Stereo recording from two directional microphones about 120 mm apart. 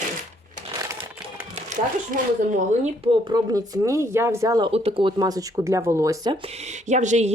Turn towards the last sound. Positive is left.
turn(degrees=-80)